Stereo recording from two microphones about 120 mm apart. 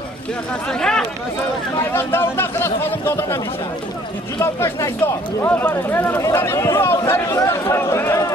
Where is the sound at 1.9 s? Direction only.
20° left (ahead or behind).